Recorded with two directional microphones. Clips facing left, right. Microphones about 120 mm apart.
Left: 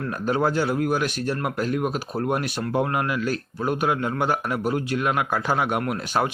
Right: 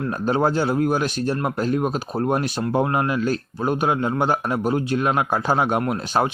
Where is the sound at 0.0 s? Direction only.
30° right (ahead or behind).